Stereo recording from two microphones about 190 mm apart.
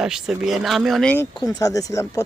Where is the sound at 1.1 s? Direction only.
15° left (ahead or behind).